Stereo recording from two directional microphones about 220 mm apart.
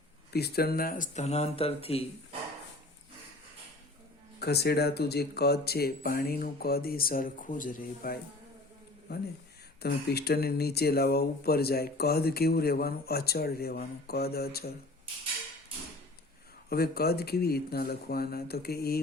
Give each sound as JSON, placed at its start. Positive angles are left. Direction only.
{"t": 0.3, "sound": "speech", "side_deg": 45}
{"t": 4.4, "sound": "speech", "side_deg": 45}
{"t": 16.6, "sound": "speech", "side_deg": 45}